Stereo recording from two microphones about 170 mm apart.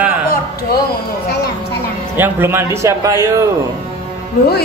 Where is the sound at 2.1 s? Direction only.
10° right (ahead or behind).